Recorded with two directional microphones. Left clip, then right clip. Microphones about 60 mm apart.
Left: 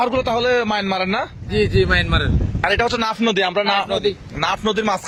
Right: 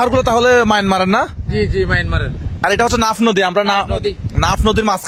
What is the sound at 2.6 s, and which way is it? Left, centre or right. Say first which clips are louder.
Speech: right 5 dB; right.